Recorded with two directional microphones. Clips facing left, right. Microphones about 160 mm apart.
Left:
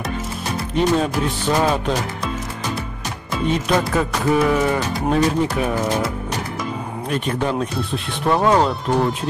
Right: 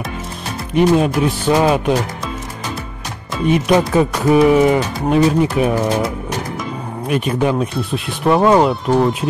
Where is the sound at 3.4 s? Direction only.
10° right (ahead or behind).